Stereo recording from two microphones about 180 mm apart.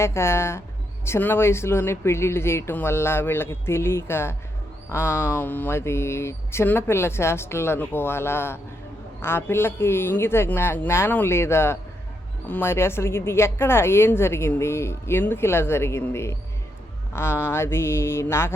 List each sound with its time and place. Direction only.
0.0 s a woman's voice: 15° left (ahead or behind)